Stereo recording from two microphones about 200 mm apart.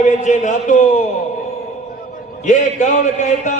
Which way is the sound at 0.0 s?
35° left (ahead or behind).